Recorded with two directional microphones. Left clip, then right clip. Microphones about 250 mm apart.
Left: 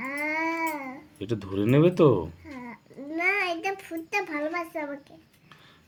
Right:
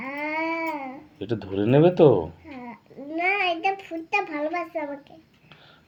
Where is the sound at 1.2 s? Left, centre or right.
Left.